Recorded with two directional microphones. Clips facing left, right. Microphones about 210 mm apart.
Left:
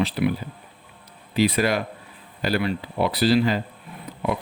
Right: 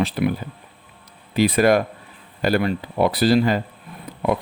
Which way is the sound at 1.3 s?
50° right (ahead or behind).